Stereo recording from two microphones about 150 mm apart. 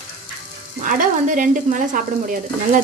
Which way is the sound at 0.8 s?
60° right (ahead or behind).